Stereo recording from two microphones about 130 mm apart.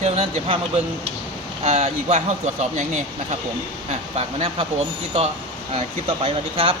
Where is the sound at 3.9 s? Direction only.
50° right (ahead or behind).